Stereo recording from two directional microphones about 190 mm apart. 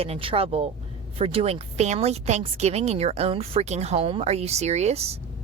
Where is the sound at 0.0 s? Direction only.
30° right (ahead or behind).